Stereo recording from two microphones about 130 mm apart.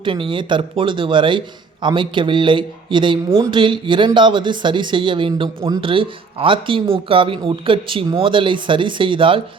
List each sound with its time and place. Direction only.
0.0 s speech: 40° right (ahead or behind)